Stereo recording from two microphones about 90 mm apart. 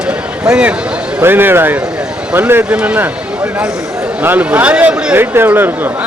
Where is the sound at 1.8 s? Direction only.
10° right (ahead or behind).